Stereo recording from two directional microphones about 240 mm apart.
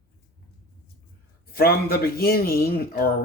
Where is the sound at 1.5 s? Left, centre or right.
Left.